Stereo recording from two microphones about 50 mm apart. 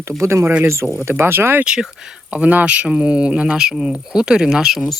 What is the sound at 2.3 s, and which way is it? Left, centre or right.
Speech, right.